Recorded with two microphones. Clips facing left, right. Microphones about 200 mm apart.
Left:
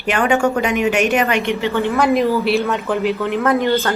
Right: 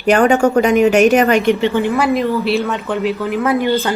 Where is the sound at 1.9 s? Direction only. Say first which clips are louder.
Even; centre (ahead or behind).